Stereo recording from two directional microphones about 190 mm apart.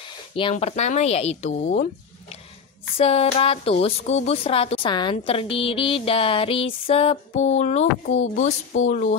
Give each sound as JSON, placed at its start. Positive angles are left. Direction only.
{"t": 0.4, "sound": "a woman's voice", "side_deg": 30}
{"t": 3.0, "sound": "a woman's voice", "side_deg": 30}